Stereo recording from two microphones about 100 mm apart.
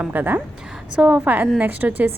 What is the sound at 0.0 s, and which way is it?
A woman's voice, 20° right (ahead or behind).